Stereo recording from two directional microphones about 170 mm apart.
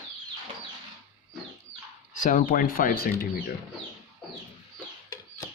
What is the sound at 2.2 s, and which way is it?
Speech, 50° left (ahead or behind).